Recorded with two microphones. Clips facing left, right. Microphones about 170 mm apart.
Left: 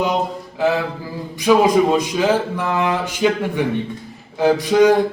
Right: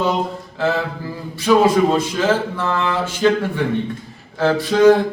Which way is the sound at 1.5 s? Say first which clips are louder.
Even; 15° left (ahead or behind).